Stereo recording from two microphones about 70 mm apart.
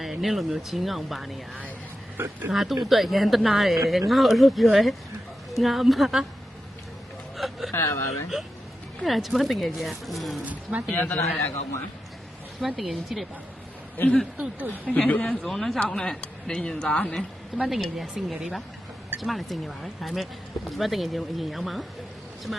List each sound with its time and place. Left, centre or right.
0.0 s speech: centre
2.1 s speech: right
2.5 s speech: centre
7.3 s a sound: centre
7.7 s speech: left
9.0 s speech: centre
10.4 s speech: right
10.9 s a man's voice: left
12.5 s speech: centre
13.9 s a man's voice: left
14.3 s speech: right
14.8 s a woman's voice: centre
15.3 s a woman's voice: centre
17.7 s speech: centre